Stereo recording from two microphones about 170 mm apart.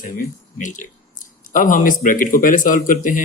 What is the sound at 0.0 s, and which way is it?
Speech, 50° left (ahead or behind).